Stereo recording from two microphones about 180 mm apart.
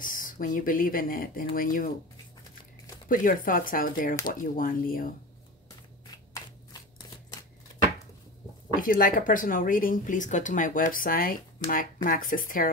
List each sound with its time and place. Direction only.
0.0 s speech: 50° left (ahead or behind)
3.1 s speech: 50° left (ahead or behind)
8.7 s speech: 50° left (ahead or behind)